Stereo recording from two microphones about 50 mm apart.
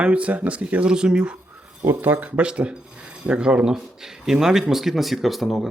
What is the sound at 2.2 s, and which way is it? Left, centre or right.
Speech, right.